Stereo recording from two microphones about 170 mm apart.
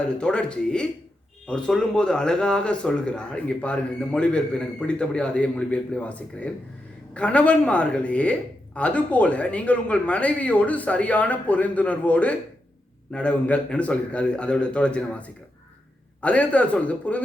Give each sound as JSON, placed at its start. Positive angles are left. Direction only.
{"t": 0.1, "sound": "a man's voice", "side_deg": 5}